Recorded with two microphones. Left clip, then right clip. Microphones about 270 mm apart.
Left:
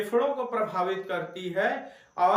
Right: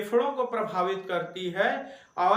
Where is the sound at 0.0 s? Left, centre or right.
Centre.